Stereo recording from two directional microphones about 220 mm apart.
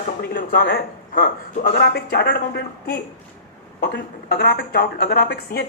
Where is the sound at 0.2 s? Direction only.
45° left (ahead or behind).